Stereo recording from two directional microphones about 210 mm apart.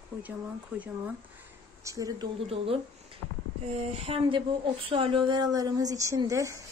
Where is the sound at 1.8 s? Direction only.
15° right (ahead or behind).